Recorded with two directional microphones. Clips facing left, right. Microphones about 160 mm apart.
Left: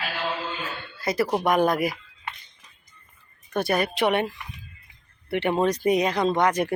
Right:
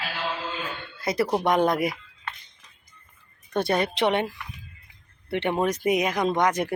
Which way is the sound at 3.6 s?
25° right (ahead or behind).